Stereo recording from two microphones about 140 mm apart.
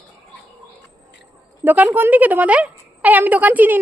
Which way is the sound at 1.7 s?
15° right (ahead or behind).